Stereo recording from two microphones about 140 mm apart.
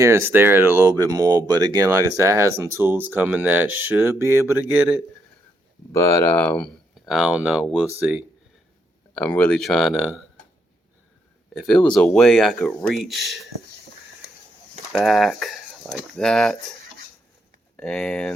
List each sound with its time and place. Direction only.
0.0 s speech: 20° right (ahead or behind)
5.9 s speech: 20° left (ahead or behind)
7.0 s speech: centre (ahead or behind)
9.1 s speech: 10° left (ahead or behind)
11.5 s speech: 5° left (ahead or behind)
14.9 s speech: centre (ahead or behind)
17.7 s speech: 5° left (ahead or behind)